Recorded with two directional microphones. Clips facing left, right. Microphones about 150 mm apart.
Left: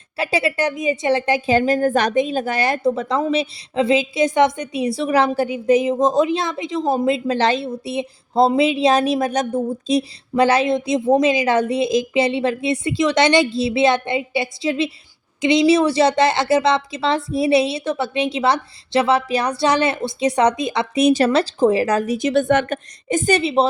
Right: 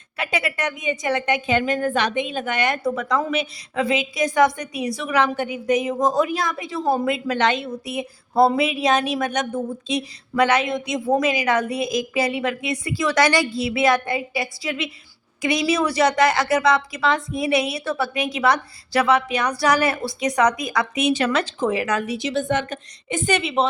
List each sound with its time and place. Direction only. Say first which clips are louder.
0.2 s a woman's voice: left 5 dB; 30° left (ahead or behind); by 22.8 s 60° left (ahead or behind)
23.0 s a woman's voice: left 5 dB; 40° left (ahead or behind)